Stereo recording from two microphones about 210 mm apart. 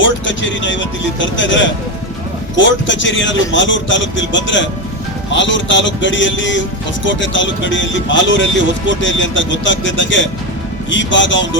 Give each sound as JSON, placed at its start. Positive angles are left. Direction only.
{"t": 0.0, "sound": "speech", "side_deg": 60}